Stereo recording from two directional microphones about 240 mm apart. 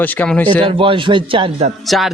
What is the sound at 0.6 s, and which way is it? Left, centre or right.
A man's voice, right.